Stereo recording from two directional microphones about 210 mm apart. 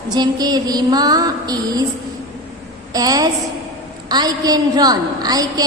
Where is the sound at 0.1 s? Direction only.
20° right (ahead or behind).